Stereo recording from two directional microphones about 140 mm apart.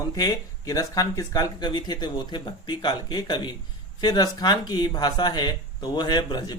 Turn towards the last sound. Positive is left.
turn(degrees=30)  # may be behind; listen again after turning